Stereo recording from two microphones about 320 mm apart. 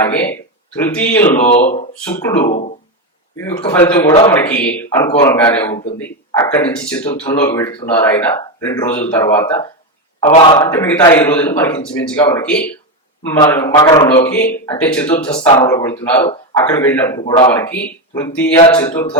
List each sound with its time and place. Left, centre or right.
0.0 s a man's voice: centre
1.4 s speech: left
3.7 s a man's voice: centre
15.4 s a man's voice: centre